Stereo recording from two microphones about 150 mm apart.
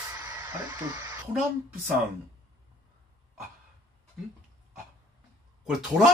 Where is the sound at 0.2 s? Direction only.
20° right (ahead or behind).